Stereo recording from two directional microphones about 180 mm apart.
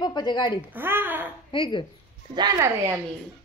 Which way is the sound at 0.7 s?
10° right (ahead or behind).